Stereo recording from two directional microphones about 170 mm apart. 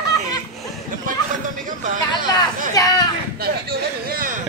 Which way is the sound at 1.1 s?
55° right (ahead or behind).